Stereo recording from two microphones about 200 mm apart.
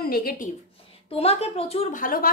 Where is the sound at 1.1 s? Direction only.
30° left (ahead or behind).